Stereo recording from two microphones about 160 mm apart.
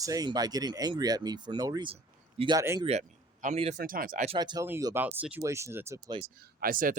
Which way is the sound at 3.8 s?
65° right (ahead or behind).